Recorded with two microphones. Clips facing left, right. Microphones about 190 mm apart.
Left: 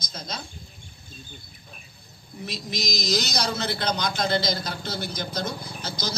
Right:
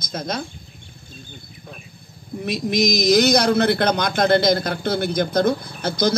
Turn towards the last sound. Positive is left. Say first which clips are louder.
# right 12 dB
turn(degrees=-55)  # may be behind; listen again after turning